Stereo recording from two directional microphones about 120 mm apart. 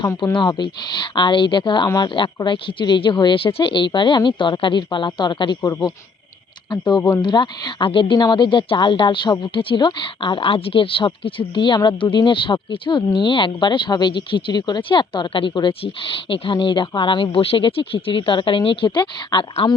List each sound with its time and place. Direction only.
0.3 s speech: 40° left (ahead or behind)